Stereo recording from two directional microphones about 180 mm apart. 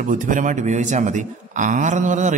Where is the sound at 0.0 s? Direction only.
45° right (ahead or behind).